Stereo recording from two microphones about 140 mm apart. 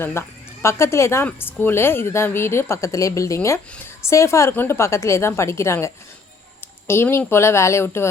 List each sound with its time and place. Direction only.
0.0 s speech: 15° left (ahead or behind)